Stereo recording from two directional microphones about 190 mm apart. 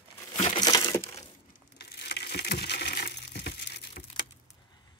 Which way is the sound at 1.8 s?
55° left (ahead or behind).